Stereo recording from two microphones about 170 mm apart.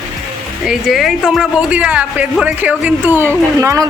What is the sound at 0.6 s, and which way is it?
A man's voice, centre (ahead or behind).